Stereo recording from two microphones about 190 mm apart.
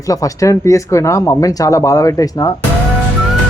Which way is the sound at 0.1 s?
15° left (ahead or behind).